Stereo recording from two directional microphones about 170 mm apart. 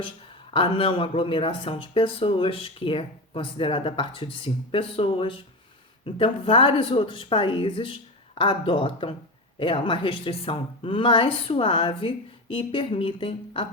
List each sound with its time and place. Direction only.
0.5 s speech: 30° left (ahead or behind)